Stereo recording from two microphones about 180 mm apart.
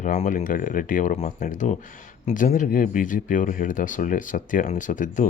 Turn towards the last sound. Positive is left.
turn(degrees=45)  # may be behind; listen again after turning